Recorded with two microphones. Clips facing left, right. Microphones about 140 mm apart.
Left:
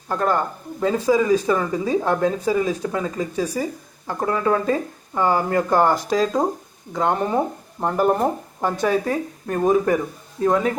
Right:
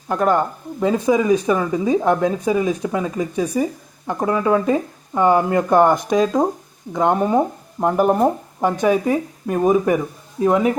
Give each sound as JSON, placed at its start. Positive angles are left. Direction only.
{"t": 0.1, "sound": "speech", "side_deg": -15}